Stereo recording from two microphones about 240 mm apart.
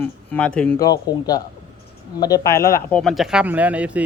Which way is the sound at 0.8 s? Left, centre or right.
Centre.